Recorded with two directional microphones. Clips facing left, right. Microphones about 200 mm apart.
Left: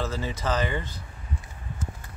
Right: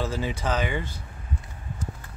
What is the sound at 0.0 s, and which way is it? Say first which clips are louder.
Speech: right 1 dB; 10° right (ahead or behind).